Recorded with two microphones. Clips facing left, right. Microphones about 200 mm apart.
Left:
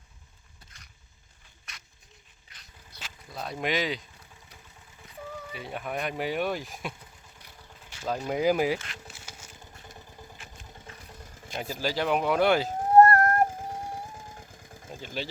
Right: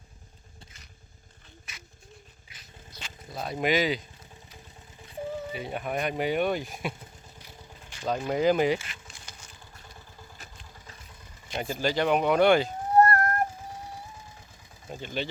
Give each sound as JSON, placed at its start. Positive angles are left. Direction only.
{"t": 1.7, "sound": "a sound", "side_deg": -5}
{"t": 2.5, "sound": "dog", "side_deg": -5}
{"t": 3.3, "sound": "speech", "side_deg": 0}
{"t": 5.0, "sound": "music", "side_deg": -25}
{"t": 5.5, "sound": "speech", "side_deg": 0}
{"t": 7.9, "sound": "a sound", "side_deg": 5}
{"t": 8.3, "sound": "speech", "side_deg": 10}
{"t": 9.0, "sound": "a sound", "side_deg": 5}
{"t": 9.8, "sound": "vehicle", "side_deg": 20}
{"t": 11.6, "sound": "speech", "side_deg": 5}
{"t": 12.6, "sound": "music", "side_deg": 50}
{"t": 14.8, "sound": "engine", "side_deg": 0}